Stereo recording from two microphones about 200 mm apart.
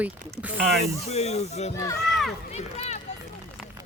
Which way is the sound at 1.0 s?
30° left (ahead or behind).